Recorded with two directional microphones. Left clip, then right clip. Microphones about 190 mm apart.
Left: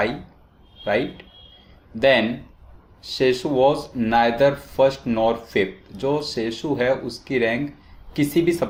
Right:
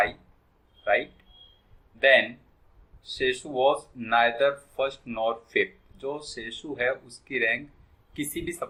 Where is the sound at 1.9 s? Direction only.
45° left (ahead or behind).